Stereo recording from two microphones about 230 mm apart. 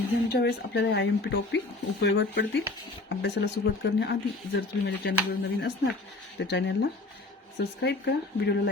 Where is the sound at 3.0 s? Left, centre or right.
Left.